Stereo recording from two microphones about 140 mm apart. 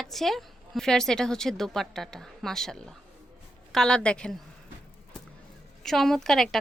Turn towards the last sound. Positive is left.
turn(degrees=5)  # may be behind; listen again after turning